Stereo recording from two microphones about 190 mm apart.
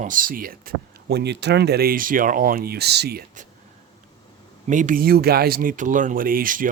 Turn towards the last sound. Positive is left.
turn(degrees=-45)  # may be behind; listen again after turning